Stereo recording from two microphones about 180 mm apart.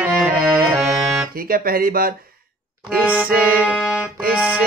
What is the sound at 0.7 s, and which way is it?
Accordion, centre (ahead or behind).